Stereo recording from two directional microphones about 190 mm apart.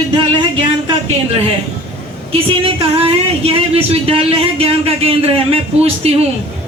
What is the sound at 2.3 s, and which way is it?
A woman's voice, 30° right (ahead or behind).